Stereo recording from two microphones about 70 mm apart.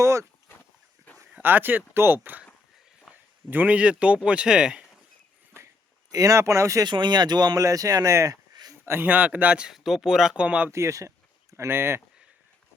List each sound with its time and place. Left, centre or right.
0.0 s a sound: right
1.4 s speech: right
3.5 s speech: right
6.1 s speech: right
6.8 s speech: right
7.6 s speech: right
8.8 s speech: right
9.7 s speech: centre
10.7 s speech: right